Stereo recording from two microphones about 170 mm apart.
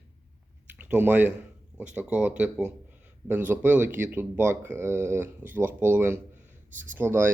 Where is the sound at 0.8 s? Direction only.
10° right (ahead or behind).